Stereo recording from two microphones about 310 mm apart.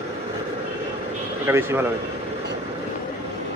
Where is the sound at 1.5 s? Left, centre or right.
Centre.